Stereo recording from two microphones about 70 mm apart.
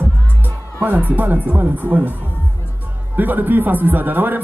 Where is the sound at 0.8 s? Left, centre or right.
Right.